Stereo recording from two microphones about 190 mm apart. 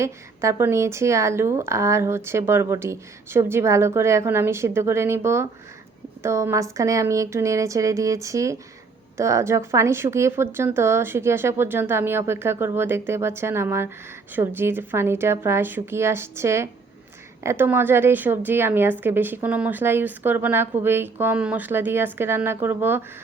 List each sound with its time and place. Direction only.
0.0 s a woman's voice: 15° right (ahead or behind)